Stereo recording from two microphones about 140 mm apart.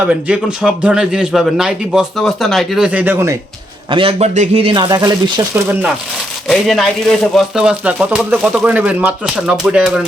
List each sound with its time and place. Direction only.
0.0 s a man's voice: 10° right (ahead or behind)
3.8 s speech: 40° right (ahead or behind)
4.9 s speech: 25° right (ahead or behind)
5.5 s speech: 10° right (ahead or behind)
6.5 s speech: centre (ahead or behind)